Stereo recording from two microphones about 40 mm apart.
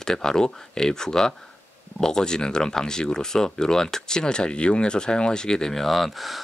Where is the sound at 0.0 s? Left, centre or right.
Centre.